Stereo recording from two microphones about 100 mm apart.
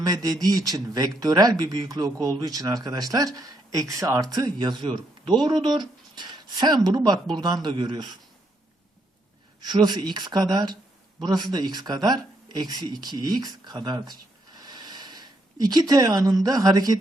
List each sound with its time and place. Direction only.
0.0 s speech: 40° right (ahead or behind)
9.6 s speech: 45° right (ahead or behind)